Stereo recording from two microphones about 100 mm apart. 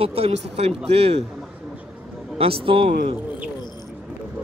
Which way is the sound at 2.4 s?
70° right (ahead or behind).